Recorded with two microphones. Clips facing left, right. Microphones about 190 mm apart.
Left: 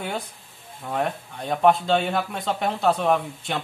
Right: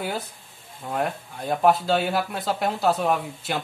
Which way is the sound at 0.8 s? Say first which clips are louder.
Left 1 dB; centre (ahead or behind).